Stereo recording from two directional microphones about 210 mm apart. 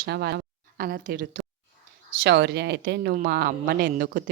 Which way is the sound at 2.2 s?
55° right (ahead or behind).